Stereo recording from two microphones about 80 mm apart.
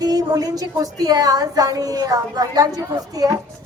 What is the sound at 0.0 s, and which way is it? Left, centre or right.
A woman's voice, right.